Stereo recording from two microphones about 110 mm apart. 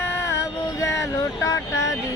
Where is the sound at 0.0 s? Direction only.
25° left (ahead or behind).